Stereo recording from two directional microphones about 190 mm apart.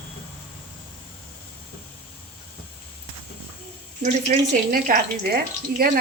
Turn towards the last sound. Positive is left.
turn(degrees=-50)  # may be behind; listen again after turning